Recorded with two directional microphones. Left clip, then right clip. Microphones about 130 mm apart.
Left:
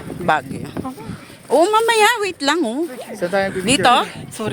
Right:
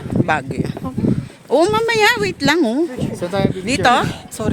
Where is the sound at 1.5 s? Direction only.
45° right (ahead or behind).